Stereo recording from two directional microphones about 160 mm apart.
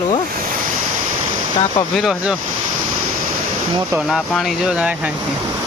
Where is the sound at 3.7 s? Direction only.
25° right (ahead or behind).